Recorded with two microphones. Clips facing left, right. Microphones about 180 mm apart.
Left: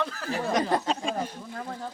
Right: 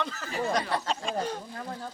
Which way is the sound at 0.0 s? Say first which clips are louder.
Left 2 dB; centre (ahead or behind).